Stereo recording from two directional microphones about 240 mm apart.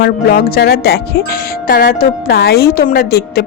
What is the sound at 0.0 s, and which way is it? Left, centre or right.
Speech, left.